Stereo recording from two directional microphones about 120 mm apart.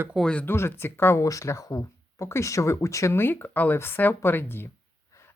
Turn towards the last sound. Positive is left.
turn(degrees=15)  # may be behind; listen again after turning